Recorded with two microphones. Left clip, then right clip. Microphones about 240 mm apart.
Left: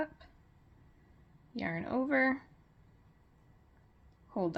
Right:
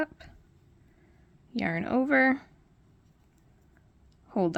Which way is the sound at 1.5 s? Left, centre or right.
Right.